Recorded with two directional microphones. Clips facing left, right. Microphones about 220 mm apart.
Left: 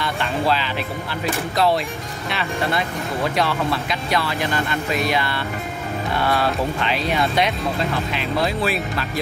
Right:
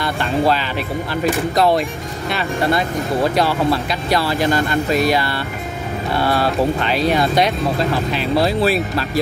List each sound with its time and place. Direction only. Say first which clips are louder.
0.0 s music: right 5 dB; 40° right (ahead or behind)
1.5 s speech: right 2 dB; 45° right (ahead or behind)
3.3 s speech: right 5 dB; 35° right (ahead or behind)
6.9 s speech: right 5 dB; 35° right (ahead or behind)